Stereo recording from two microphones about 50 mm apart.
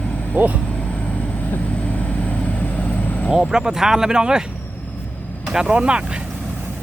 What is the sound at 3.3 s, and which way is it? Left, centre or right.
Speech, centre.